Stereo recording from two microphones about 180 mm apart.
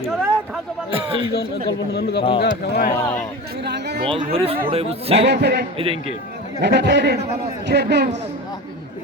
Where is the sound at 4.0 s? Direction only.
30° right (ahead or behind).